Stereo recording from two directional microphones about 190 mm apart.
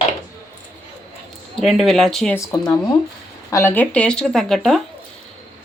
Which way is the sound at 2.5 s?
20° left (ahead or behind).